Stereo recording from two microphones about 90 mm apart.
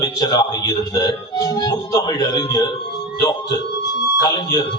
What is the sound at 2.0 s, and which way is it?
Speech, 60° left (ahead or behind).